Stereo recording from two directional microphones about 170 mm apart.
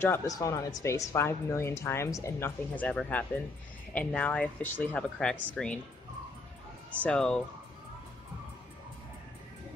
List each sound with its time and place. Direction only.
0.0 s speech: 15° left (ahead or behind)
7.0 s speech: 5° left (ahead or behind)